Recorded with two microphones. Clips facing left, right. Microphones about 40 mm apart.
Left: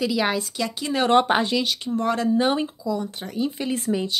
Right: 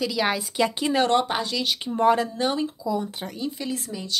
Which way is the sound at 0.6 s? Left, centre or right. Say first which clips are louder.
Right 4 dB; right.